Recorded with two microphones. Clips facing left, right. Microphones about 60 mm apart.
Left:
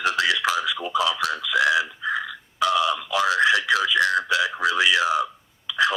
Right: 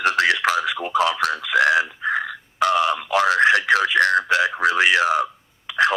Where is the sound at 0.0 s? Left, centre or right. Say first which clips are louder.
Right 3 dB; right.